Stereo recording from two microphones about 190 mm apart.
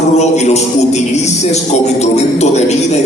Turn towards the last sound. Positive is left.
turn(degrees=35)  # may be behind; listen again after turning